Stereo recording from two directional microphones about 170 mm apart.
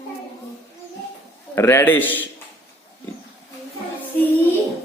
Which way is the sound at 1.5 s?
15° left (ahead or behind).